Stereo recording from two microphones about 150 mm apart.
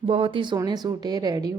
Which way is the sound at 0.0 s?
40° right (ahead or behind).